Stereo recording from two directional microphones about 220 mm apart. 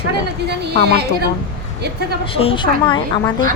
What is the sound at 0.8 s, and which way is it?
Speech, 45° right (ahead or behind).